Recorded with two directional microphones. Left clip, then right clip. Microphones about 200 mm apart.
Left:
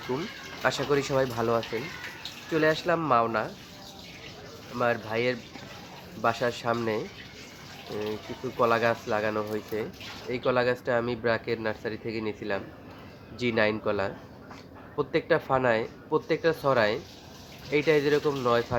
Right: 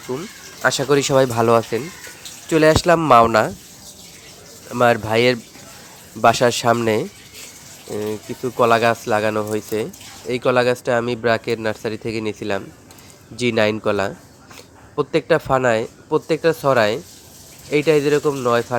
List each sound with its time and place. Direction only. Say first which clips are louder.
0.1 s speech: right 5 dB; 15° right (ahead or behind)
0.6 s speech: right 9 dB; 40° right (ahead or behind)
4.7 s speech: right 12 dB; 50° right (ahead or behind)
8.5 s speech: right 9 dB; 45° right (ahead or behind)